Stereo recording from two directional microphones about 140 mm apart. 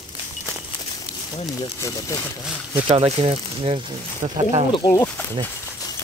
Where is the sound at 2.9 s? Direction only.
45° right (ahead or behind).